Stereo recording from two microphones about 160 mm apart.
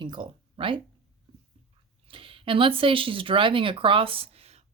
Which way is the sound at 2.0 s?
35° right (ahead or behind).